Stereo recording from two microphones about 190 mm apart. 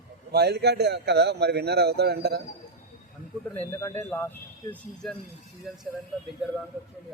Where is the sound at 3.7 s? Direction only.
15° left (ahead or behind).